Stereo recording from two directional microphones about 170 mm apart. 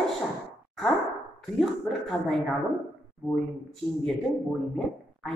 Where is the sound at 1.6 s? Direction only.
Centre (ahead or behind).